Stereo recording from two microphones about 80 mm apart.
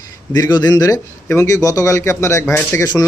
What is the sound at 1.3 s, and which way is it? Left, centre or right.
Speech, left.